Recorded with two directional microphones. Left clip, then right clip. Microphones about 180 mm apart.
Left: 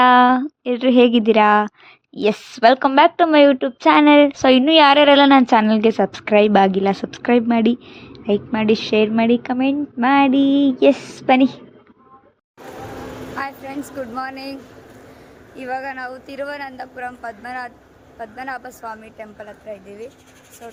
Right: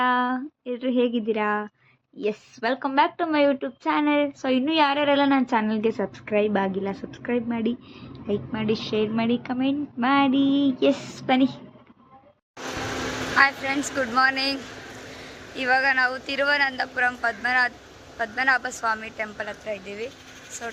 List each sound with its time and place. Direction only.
0.0 s a sound: 65° left (ahead or behind)
2.1 s a woman's voice: 75° left (ahead or behind); by 11.6 s 30° left (ahead or behind)
13.4 s speech: 10° left (ahead or behind)
15.5 s a woman's voice: 5° left (ahead or behind)